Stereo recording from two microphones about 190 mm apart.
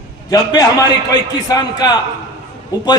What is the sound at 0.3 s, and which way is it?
A man's voice, 20° left (ahead or behind).